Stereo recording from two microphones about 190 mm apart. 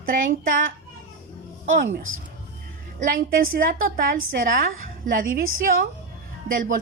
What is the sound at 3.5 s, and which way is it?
A woman's voice, 50° right (ahead or behind).